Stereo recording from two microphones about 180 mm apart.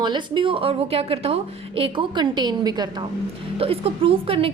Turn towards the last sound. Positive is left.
turn(degrees=-30)  # may be behind; listen again after turning